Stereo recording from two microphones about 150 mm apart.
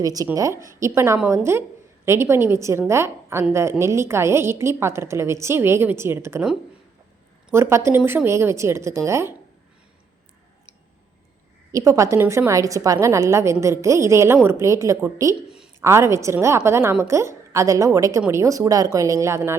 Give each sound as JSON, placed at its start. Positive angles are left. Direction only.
{"t": 0.0, "sound": "a woman's voice", "side_deg": -25}
{"t": 7.5, "sound": "a woman's voice", "side_deg": -20}
{"t": 11.7, "sound": "a woman's voice", "side_deg": -20}
{"t": 15.4, "sound": "a sound", "side_deg": -5}
{"t": 15.8, "sound": "a woman's voice", "side_deg": -20}